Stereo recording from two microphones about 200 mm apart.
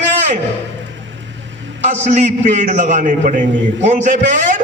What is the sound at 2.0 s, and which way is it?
A man's voice, 35° right (ahead or behind).